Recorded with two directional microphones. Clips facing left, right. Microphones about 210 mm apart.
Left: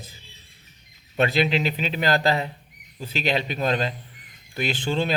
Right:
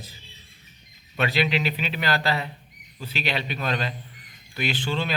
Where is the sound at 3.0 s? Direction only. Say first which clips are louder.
Left 4 dB; 45° left (ahead or behind).